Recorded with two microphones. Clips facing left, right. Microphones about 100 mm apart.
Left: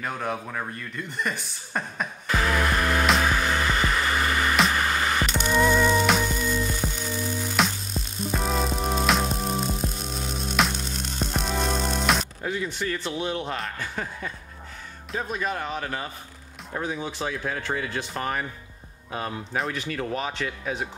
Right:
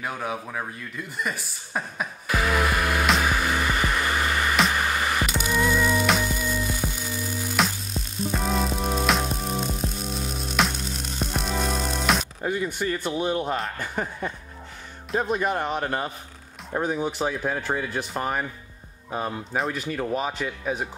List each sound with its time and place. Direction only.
0.0 s a sound: 5° right (ahead or behind)
12.4 s speech: 15° right (ahead or behind)
15.4 s speech: 20° right (ahead or behind)